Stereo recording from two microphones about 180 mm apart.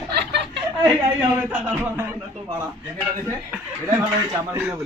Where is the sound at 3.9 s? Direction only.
20° right (ahead or behind).